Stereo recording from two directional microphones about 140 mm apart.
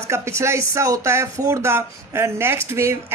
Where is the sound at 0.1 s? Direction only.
20° right (ahead or behind).